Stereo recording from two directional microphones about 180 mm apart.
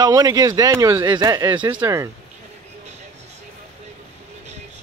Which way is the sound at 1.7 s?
15° right (ahead or behind).